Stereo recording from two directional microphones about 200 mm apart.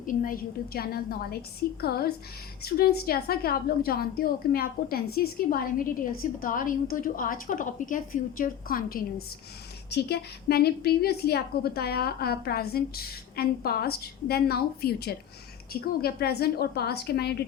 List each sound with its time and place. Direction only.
0.0 s a woman's voice: 45° left (ahead or behind)